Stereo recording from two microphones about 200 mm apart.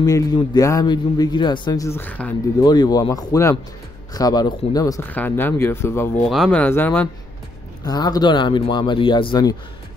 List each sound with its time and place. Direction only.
0.0 s a man's voice: 20° left (ahead or behind)
2.6 s a man's voice: 20° left (ahead or behind)